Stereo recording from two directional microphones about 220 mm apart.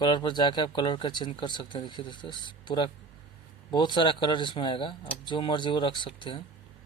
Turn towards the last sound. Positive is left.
turn(degrees=20)  # may be behind; listen again after turning